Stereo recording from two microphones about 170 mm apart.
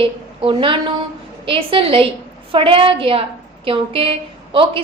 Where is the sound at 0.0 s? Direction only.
30° right (ahead or behind).